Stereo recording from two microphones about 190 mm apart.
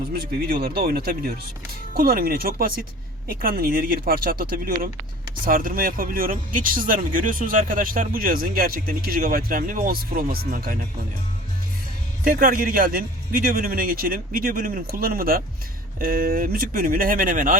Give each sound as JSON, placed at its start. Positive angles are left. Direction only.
{"t": 0.2, "sound": "a man's voice", "side_deg": -50}
{"t": 12.2, "sound": "a man's voice", "side_deg": -50}